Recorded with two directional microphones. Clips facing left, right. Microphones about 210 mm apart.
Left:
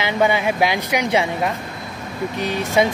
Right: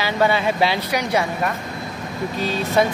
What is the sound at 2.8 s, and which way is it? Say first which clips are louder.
Speech: left 1 dB; 20° left (ahead or behind).